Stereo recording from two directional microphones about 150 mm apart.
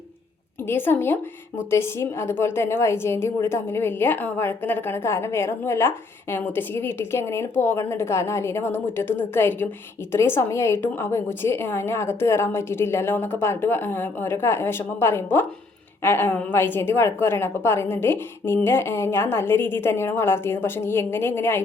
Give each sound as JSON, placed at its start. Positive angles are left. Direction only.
{"t": 0.7, "sound": "a woman's voice", "side_deg": 15}